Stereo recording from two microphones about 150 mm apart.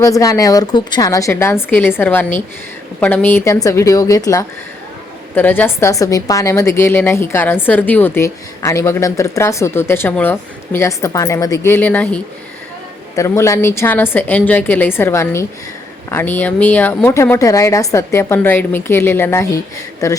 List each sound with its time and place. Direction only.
0.0 s a woman's voice: 20° left (ahead or behind)
5.3 s a woman's voice: 10° left (ahead or behind)